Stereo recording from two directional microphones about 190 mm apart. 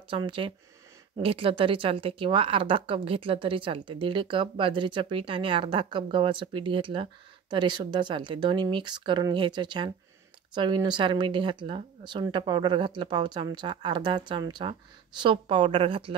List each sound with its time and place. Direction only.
0.1 s a woman's voice: 25° right (ahead or behind)